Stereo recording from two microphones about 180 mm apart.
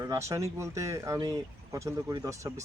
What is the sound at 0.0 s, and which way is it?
Speech, 15° right (ahead or behind).